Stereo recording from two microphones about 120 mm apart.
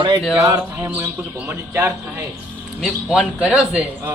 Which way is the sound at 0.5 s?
25° right (ahead or behind).